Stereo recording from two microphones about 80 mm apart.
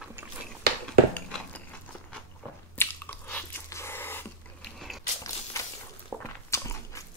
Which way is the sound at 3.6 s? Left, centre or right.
Left.